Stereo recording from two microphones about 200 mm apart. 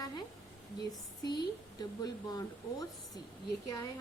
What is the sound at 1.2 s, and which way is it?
A woman's voice, 20° left (ahead or behind).